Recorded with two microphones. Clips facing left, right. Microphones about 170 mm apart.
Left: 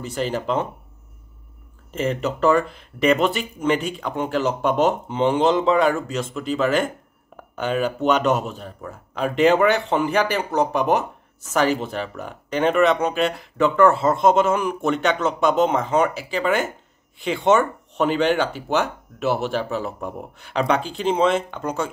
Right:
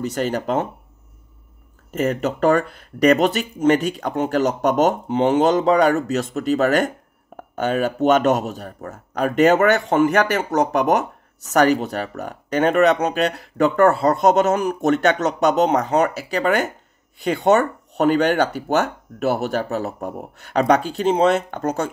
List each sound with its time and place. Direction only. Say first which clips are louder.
0.1 s speech: left 2 dB; 45° right (ahead or behind)
2.2 s speech: even; 45° right (ahead or behind)
10.7 s speech: right 2 dB; 65° right (ahead or behind)
11.4 s speech: right 4 dB; 40° right (ahead or behind)